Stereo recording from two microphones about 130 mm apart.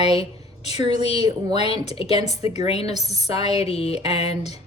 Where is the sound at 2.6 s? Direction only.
55° left (ahead or behind).